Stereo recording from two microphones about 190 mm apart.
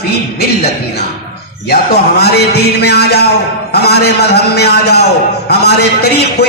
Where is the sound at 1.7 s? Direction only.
60° left (ahead or behind).